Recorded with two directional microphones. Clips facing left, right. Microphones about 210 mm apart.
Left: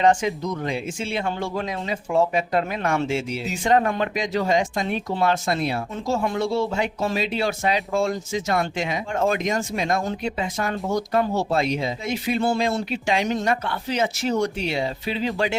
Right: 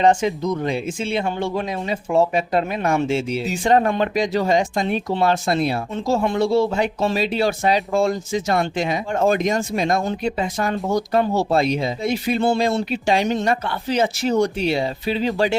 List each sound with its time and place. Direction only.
0.0 s speech: 25° right (ahead or behind)